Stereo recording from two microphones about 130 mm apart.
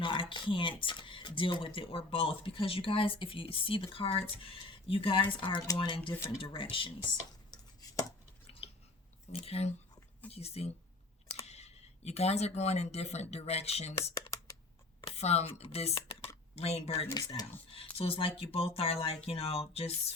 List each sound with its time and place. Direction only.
0.0 s speech: 40° left (ahead or behind)
8.6 s chewing: 45° left (ahead or behind)
9.3 s speech: 50° left (ahead or behind)
17.2 s speech: 30° left (ahead or behind)
17.7 s speech: 45° left (ahead or behind)